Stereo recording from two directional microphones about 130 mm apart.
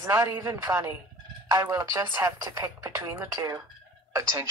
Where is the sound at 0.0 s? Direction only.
20° right (ahead or behind).